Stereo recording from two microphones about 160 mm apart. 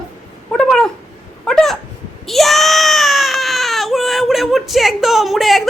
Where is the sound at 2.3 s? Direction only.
Centre (ahead or behind).